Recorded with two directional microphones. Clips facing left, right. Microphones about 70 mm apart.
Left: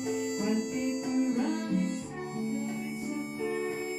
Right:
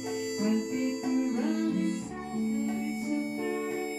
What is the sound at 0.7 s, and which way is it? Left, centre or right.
Music, right.